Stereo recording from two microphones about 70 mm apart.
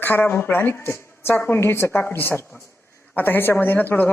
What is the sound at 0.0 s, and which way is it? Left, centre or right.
A woman's voice, left.